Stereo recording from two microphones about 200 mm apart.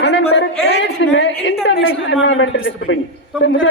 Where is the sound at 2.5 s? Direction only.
50° left (ahead or behind).